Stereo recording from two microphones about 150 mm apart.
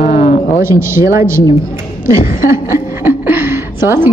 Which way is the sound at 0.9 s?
20° right (ahead or behind).